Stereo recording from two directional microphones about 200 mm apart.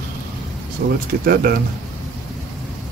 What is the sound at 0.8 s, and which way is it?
Speech, 50° right (ahead or behind).